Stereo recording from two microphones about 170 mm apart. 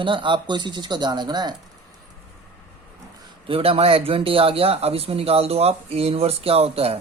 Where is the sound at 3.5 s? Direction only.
35° right (ahead or behind).